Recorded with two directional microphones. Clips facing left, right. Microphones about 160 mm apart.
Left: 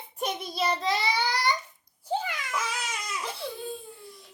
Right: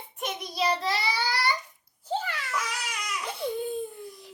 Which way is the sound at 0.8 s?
20° left (ahead or behind).